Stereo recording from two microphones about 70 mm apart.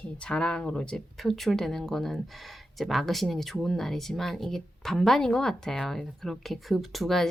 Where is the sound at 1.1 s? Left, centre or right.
Centre.